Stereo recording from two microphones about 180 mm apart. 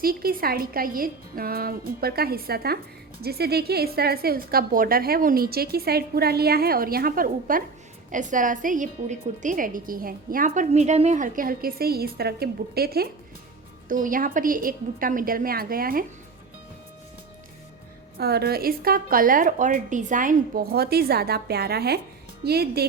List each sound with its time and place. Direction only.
0.0 s a woman's voice: 55° right (ahead or behind)
13.8 s speech: 50° right (ahead or behind)
18.2 s a woman's voice: 60° right (ahead or behind)